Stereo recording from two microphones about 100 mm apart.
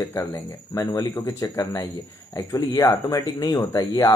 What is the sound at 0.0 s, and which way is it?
Speech, 25° left (ahead or behind).